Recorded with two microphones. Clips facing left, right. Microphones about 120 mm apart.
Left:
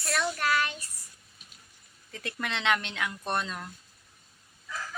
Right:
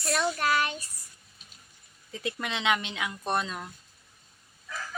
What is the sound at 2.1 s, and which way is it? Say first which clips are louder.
Speech: right 2 dB; 5° right (ahead or behind).